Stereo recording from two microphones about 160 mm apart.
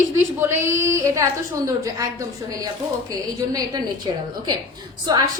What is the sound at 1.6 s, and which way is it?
A woman's voice, 20° right (ahead or behind).